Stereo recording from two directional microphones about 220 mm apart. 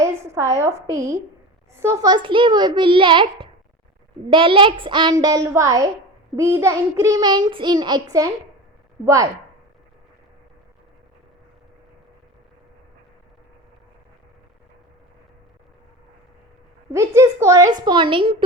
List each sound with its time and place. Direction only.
0.0 s a woman's voice: 15° right (ahead or behind)
16.9 s a child's voice: 15° right (ahead or behind)